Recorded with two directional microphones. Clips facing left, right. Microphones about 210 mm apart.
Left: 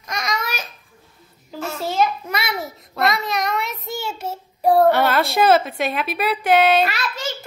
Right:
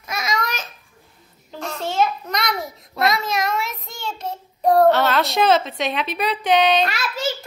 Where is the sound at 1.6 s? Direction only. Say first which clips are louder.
Left 1 dB; 5° left (ahead or behind).